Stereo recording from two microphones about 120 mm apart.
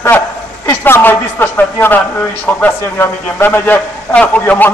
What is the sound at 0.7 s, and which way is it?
Speech, 20° left (ahead or behind).